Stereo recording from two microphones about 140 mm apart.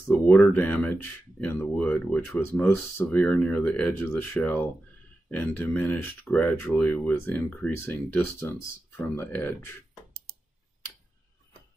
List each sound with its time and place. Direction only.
0.1 s speech: 10° left (ahead or behind)